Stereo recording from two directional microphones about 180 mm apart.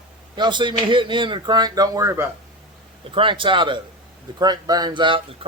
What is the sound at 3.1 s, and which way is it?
Speech, 30° right (ahead or behind).